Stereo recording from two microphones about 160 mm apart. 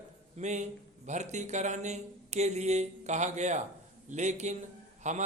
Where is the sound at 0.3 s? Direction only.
45° right (ahead or behind).